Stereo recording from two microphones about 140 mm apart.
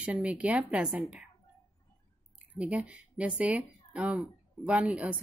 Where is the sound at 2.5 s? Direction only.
10° right (ahead or behind).